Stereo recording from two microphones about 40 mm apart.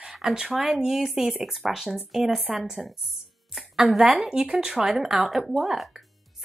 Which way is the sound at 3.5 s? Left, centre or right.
Centre.